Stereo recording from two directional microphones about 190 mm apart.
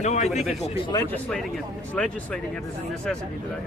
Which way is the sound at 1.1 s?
Centre (ahead or behind).